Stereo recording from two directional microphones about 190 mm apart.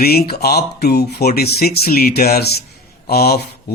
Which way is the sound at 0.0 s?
55° left (ahead or behind).